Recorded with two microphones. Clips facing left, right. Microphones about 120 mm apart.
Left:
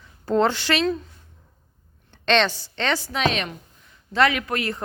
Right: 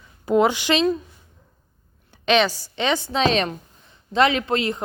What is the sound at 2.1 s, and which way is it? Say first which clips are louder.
A woman's voice: right 2 dB; 10° right (ahead or behind).